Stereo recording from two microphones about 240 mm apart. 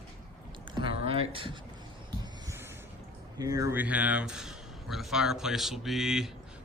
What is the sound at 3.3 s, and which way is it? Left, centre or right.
Speech, centre.